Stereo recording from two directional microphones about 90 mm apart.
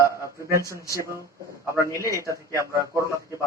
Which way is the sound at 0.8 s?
35° left (ahead or behind).